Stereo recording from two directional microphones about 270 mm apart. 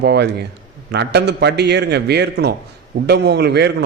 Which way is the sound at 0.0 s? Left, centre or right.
Right.